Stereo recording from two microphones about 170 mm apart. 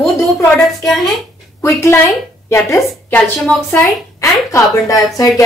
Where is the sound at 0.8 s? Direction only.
Centre (ahead or behind).